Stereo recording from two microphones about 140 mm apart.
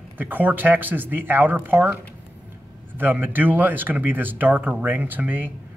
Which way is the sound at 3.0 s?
15° right (ahead or behind).